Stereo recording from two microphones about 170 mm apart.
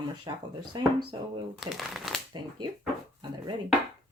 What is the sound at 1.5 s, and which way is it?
Speech, centre (ahead or behind).